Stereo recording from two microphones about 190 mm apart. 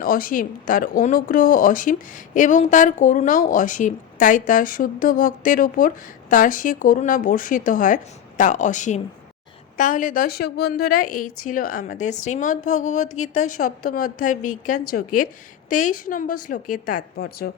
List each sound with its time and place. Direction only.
0.0 s a woman's voice: 50° left (ahead or behind)